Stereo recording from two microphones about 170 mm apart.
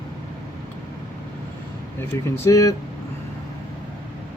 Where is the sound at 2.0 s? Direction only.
15° left (ahead or behind).